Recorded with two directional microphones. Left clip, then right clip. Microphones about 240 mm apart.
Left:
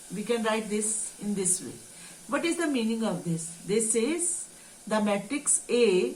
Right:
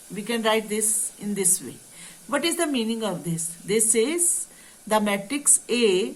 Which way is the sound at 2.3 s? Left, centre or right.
Right.